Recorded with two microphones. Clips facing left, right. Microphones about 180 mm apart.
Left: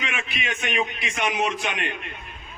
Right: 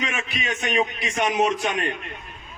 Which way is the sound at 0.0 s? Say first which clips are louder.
Right 3 dB; 40° right (ahead or behind).